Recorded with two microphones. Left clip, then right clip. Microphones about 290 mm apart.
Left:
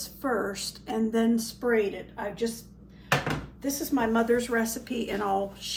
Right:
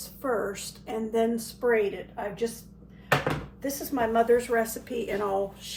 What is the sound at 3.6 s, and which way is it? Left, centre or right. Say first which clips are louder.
A woman's voice: left 1 dB; centre.